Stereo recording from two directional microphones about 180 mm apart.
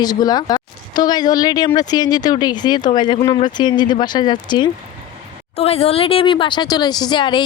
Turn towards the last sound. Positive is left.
turn(degrees=25)  # may be behind; listen again after turning